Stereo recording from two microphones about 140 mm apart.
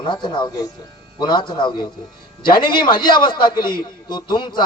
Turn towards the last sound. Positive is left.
turn(degrees=30)  # may be behind; listen again after turning